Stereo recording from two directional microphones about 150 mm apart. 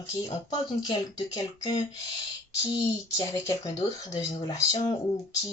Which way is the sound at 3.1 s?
25° left (ahead or behind).